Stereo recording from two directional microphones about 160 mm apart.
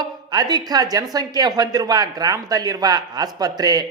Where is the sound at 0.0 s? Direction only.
25° right (ahead or behind).